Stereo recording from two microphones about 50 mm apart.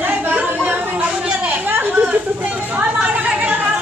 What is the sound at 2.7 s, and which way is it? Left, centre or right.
Chatter, right.